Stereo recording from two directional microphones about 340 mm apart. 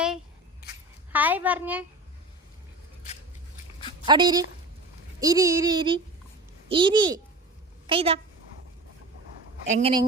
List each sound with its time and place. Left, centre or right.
1.1 s a child's voice: centre
4.0 s a sound: centre
9.6 s speech: centre